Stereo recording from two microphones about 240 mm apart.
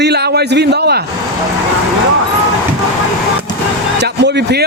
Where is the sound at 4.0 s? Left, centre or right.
Right.